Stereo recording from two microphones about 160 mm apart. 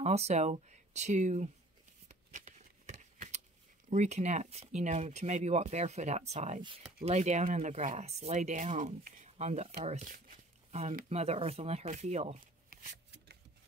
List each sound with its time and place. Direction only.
0.0 s speech: 40° right (ahead or behind)
2.0 s shuffling cards: 50° right (ahead or behind)
3.9 s speech: 45° right (ahead or behind)
11.1 s speech: 40° right (ahead or behind)
12.6 s shuffling cards: 65° right (ahead or behind)